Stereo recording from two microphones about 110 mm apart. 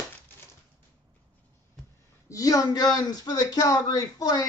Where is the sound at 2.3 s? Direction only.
30° left (ahead or behind).